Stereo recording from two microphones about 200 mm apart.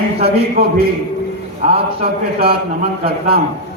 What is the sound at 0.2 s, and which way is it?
Speech, 30° right (ahead or behind).